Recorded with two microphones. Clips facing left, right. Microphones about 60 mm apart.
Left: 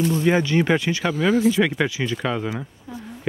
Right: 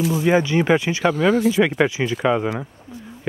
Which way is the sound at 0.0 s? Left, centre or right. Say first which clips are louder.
Right 1 dB; centre.